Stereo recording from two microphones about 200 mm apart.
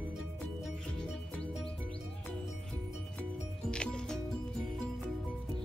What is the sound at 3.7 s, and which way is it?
Music, 5° left (ahead or behind).